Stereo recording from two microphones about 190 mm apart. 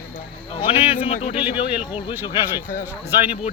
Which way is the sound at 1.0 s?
35° left (ahead or behind).